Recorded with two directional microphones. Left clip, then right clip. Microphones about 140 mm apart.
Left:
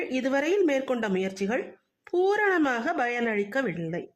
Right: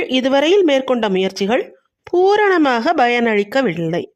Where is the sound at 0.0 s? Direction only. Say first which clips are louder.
Right 12 dB; 45° right (ahead or behind).